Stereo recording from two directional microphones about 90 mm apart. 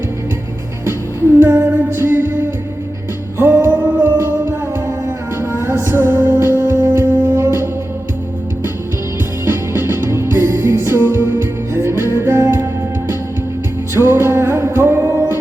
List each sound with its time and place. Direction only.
1.4 s music: 25° right (ahead or behind)
9.4 s music: 25° right (ahead or behind)
13.9 s music: 25° right (ahead or behind)